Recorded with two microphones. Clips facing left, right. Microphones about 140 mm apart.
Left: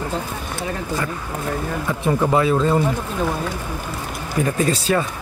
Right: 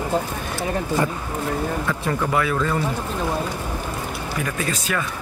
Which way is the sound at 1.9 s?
20° left (ahead or behind).